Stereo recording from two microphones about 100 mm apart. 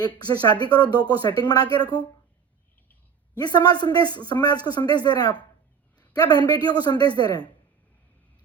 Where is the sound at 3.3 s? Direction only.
45° left (ahead or behind).